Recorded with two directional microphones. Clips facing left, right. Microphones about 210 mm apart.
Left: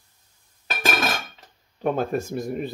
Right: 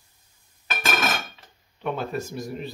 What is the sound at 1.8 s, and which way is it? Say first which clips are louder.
Speech: left 5 dB; 45° left (ahead or behind).